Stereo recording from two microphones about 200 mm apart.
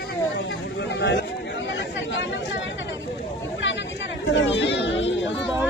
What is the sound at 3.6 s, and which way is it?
Chatter, 65° left (ahead or behind).